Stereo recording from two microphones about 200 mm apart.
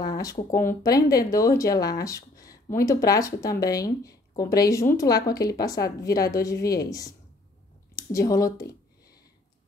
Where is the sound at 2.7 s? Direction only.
15° left (ahead or behind).